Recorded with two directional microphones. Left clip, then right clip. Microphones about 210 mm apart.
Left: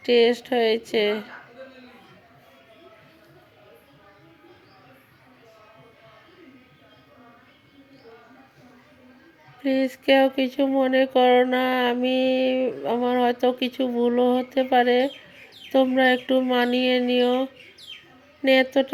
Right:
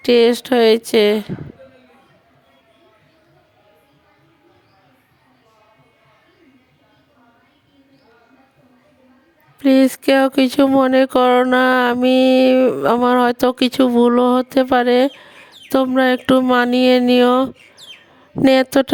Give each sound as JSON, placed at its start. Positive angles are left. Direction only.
{"t": 0.0, "sound": "speech", "side_deg": -45}
{"t": 9.6, "sound": "speech", "side_deg": -45}